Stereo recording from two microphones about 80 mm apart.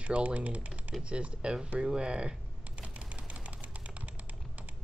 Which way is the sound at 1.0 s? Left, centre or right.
Centre.